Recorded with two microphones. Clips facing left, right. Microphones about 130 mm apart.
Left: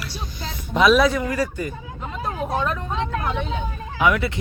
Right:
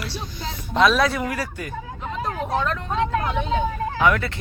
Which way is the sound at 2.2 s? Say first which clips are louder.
Even; 10° left (ahead or behind).